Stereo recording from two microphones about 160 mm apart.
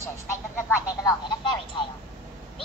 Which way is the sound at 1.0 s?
25° left (ahead or behind).